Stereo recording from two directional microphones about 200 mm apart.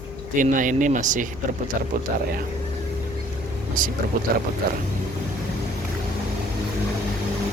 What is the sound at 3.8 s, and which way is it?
Speech, 40° right (ahead or behind).